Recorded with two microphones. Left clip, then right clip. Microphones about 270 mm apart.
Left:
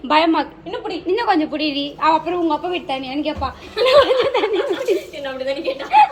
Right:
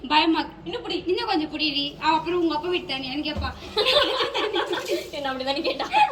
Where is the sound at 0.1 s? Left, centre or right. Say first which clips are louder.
Left 5 dB; centre.